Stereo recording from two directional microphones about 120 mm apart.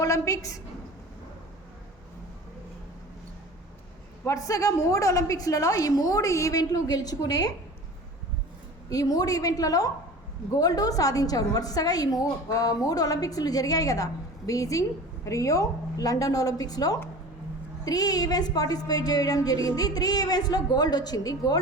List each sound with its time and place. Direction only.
0.0 s a woman's voice: 25° left (ahead or behind)
4.3 s a woman's voice: 30° left (ahead or behind)
8.9 s a woman's voice: 30° left (ahead or behind)